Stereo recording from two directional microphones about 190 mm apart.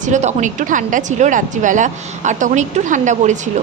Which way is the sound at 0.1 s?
40° right (ahead or behind).